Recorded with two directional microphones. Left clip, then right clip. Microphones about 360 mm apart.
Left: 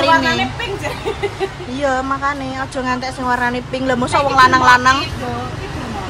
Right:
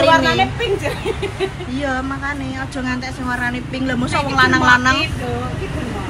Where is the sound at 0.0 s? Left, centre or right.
Centre.